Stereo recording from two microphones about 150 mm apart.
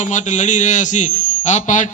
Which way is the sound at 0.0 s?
55° left (ahead or behind).